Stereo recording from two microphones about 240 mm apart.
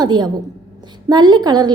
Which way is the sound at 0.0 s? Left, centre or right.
Centre.